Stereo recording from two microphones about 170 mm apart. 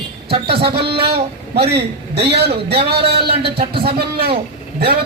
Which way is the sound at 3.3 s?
30° right (ahead or behind).